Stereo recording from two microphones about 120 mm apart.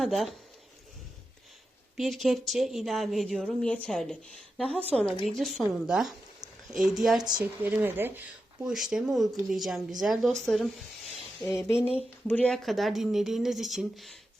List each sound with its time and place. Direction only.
0.0 s a woman's voice: centre (ahead or behind)
2.0 s a woman's voice: centre (ahead or behind)
7.2 s a woman's voice: 35° right (ahead or behind)
7.6 s speech: 15° right (ahead or behind)
8.6 s a woman's voice: 5° right (ahead or behind)
12.3 s a woman's voice: 10° left (ahead or behind)
12.6 s a woman's voice: centre (ahead or behind)